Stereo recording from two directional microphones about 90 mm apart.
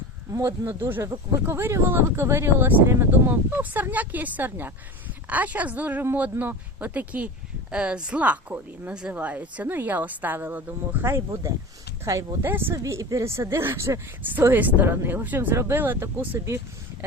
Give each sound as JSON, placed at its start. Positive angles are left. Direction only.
{"t": 0.3, "sound": "speech", "side_deg": -30}
{"t": 12.7, "sound": "speech", "side_deg": -40}
{"t": 14.5, "sound": "speech", "side_deg": -20}